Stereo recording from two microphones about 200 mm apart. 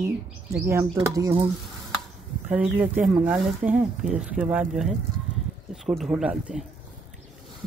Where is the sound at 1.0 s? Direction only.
15° right (ahead or behind).